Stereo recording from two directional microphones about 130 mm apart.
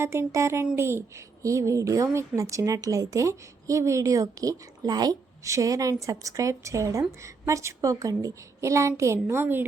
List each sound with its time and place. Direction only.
0.0 s a woman's voice: 20° right (ahead or behind)